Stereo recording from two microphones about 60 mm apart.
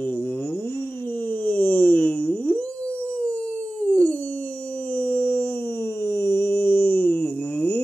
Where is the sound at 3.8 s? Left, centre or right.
Left.